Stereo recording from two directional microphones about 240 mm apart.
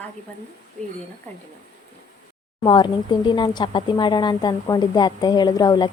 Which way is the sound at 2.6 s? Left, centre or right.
Centre.